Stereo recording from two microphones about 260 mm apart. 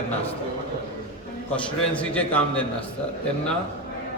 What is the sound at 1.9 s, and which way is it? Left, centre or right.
Speech, centre.